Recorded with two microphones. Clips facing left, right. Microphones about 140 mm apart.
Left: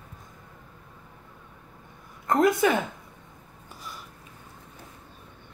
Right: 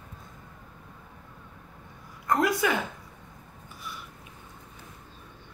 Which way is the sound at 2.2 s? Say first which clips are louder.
Left 4 dB; 25° left (ahead or behind).